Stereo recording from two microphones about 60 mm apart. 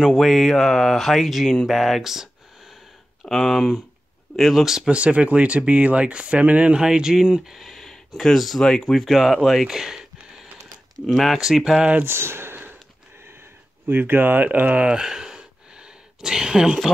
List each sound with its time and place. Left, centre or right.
0.1 s speech: centre
3.3 s speech: centre
4.9 s speech: right; by 11.8 s centre
12.0 s speech: right
13.8 s speech: right
14.8 s a sound: centre